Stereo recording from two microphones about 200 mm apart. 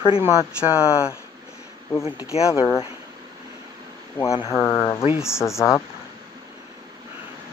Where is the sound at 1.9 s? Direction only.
15° left (ahead or behind).